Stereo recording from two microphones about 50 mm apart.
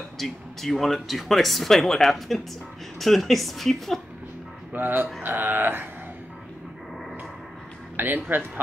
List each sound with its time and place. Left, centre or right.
0.2 s speech: centre
4.7 s speech: right
8.0 s speech: right